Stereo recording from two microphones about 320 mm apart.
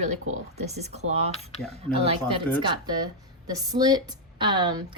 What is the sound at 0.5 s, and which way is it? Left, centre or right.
Speech, right.